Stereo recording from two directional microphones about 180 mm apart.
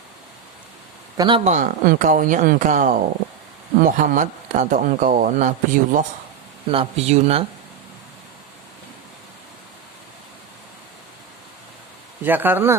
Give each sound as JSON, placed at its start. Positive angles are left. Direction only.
{"t": 1.1, "sound": "speech", "side_deg": -20}
{"t": 1.5, "sound": "speech", "side_deg": -45}
{"t": 6.7, "sound": "speech", "side_deg": -35}
{"t": 12.2, "sound": "speech", "side_deg": -10}